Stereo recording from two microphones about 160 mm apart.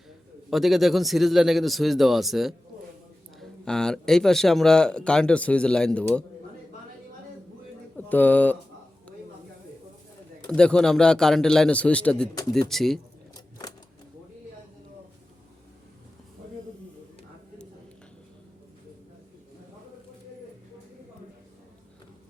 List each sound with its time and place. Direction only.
0.5 s speech: centre (ahead or behind)
7.9 s speech: 10° left (ahead or behind)
10.6 s speech: 5° left (ahead or behind)
13.3 s a sound: 25° left (ahead or behind)